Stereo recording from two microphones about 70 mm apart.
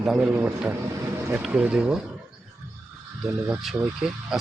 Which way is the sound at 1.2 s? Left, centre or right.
Right.